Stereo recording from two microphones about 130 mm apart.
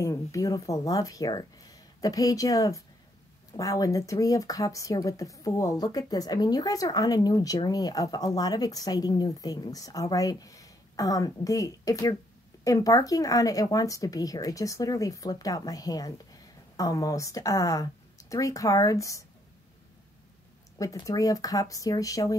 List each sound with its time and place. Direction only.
0.0 s speech: 25° left (ahead or behind)
20.7 s speech: 30° left (ahead or behind)